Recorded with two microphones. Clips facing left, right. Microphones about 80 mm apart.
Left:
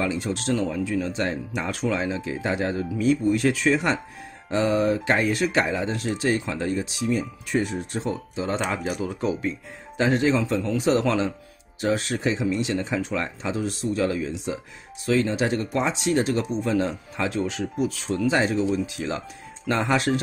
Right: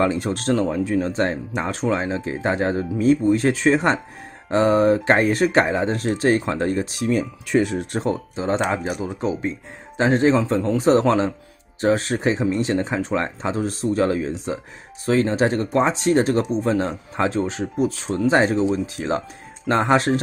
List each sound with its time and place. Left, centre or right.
0.0 s speech: right
7.1 s speech: right
8.4 s speech: right